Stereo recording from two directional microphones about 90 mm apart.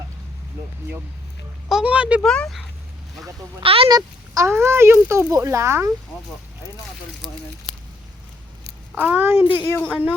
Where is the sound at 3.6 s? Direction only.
90° right.